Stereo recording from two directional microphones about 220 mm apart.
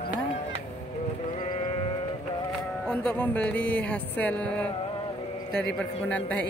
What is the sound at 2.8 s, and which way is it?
Speech, 5° left (ahead or behind).